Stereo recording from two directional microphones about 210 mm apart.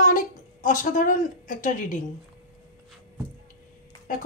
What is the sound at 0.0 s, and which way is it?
A woman's voice, 40° left (ahead or behind).